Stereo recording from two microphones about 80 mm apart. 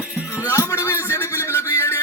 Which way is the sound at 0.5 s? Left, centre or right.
Left.